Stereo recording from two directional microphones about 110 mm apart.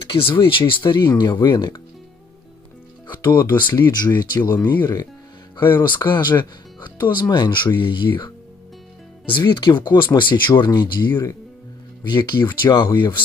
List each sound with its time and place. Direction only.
0.1 s speech: 50° left (ahead or behind)
3.5 s speech: 45° left (ahead or behind)
5.8 s speech: 45° left (ahead or behind)
9.3 s speech: 45° left (ahead or behind)
10.5 s speech: 35° left (ahead or behind)